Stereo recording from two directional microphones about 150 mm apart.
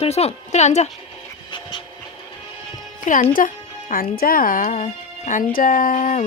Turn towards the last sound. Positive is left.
turn(degrees=60)  # may be behind; listen again after turning